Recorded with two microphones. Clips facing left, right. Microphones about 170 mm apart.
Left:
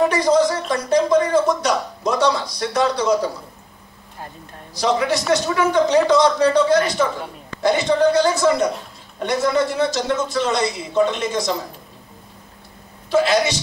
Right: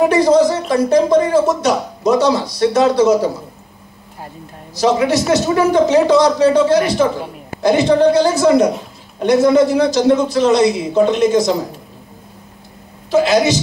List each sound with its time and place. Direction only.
0.0 s a sound: 5° right (ahead or behind)
0.6 s music: 5° right (ahead or behind)
1.0 s speech: 25° right (ahead or behind)
1.5 s a man's voice: 5° right (ahead or behind)
4.7 s a man's voice: 5° right (ahead or behind)
13.1 s a man's voice: 5° right (ahead or behind)